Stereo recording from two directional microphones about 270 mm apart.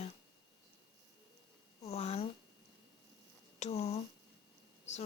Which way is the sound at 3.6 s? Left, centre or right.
Left.